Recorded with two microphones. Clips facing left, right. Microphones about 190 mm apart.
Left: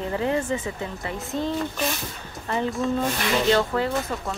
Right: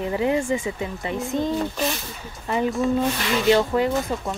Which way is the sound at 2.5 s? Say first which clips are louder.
Right 3 dB; 15° right (ahead or behind).